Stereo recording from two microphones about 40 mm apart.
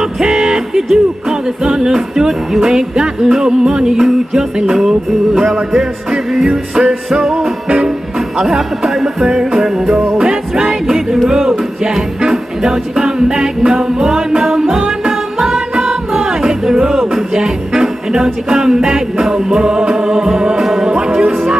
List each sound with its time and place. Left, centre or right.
0.0 s music: centre
5.3 s music: centre; by 21.3 s right